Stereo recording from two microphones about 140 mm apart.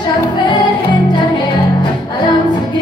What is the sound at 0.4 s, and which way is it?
Music, 35° left (ahead or behind).